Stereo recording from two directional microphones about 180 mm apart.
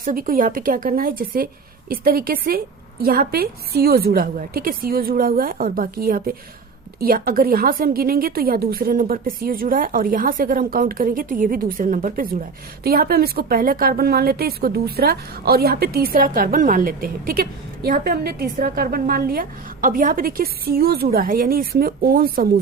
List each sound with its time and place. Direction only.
0.0 s a woman's voice: 50° right (ahead or behind)